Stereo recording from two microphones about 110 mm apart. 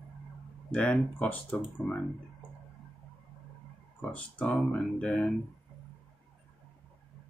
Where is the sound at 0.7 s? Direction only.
10° left (ahead or behind).